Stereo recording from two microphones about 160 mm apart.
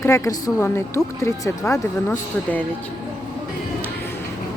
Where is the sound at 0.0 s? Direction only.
20° left (ahead or behind).